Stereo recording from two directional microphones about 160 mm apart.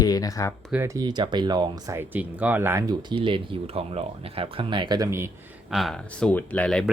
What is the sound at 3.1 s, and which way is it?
Speech, 30° right (ahead or behind).